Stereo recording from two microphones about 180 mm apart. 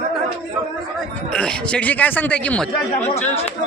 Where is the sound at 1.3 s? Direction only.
5° left (ahead or behind).